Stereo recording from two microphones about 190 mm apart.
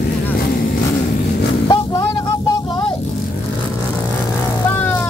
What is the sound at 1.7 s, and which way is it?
Vehicle, 20° left (ahead or behind).